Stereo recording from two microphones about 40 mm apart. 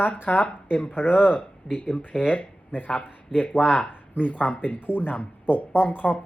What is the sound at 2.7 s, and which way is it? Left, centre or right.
Speech, left.